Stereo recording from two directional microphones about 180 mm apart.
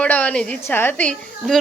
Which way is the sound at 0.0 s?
10° left (ahead or behind).